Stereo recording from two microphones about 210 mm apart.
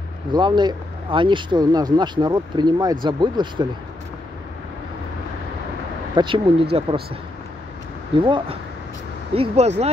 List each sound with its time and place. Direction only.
0.3 s speech: 20° right (ahead or behind)
6.1 s speech: 25° right (ahead or behind)
8.2 s speech: 25° right (ahead or behind)